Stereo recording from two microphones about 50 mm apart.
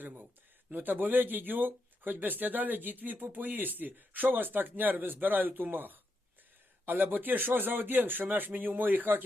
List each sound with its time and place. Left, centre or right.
0.0 s speech: right